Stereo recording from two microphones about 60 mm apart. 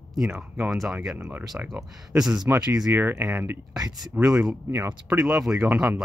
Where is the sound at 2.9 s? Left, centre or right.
Right.